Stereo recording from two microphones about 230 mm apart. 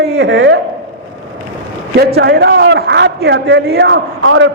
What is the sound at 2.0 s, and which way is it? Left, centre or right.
A man's voice, right.